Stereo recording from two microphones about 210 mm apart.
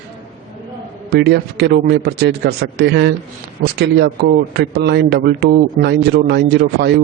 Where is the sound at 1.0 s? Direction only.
50° right (ahead or behind).